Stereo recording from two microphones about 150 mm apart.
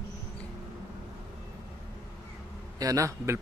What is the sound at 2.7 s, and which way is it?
Speech, 20° right (ahead or behind).